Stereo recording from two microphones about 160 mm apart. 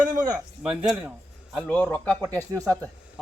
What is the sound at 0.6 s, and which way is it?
Speech, 5° right (ahead or behind).